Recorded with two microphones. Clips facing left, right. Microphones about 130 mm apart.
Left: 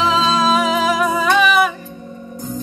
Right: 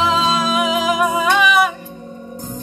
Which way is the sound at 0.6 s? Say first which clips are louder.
Left 1 dB; 10° right (ahead or behind).